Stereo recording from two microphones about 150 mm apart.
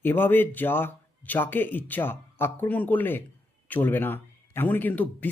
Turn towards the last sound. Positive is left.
turn(degrees=10)  # may be behind; listen again after turning